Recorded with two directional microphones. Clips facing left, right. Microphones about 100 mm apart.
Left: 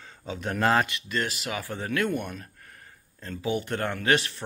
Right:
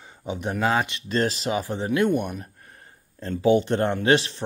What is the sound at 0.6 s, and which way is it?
Speech, 5° right (ahead or behind).